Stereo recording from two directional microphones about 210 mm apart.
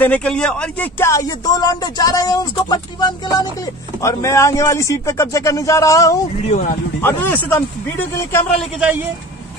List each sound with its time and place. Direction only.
0.0 s speech: 5° left (ahead or behind)
8.7 s a man's voice: 10° right (ahead or behind)